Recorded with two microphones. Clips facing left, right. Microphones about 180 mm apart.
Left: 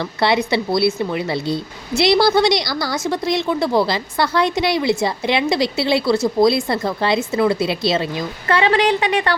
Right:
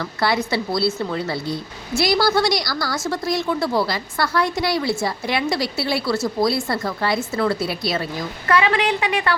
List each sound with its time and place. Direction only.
0.0 s a woman's voice: 25° left (ahead or behind)